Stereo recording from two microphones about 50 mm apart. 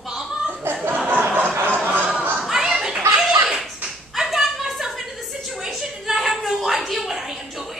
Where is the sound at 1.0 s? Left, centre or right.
Right.